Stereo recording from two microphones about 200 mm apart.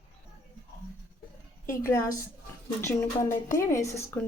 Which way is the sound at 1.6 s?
15° left (ahead or behind).